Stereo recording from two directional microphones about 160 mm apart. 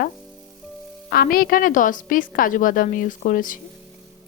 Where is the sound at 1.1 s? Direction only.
65° left (ahead or behind).